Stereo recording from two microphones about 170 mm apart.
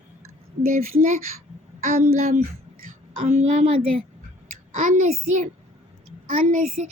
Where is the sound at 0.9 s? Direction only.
50° right (ahead or behind).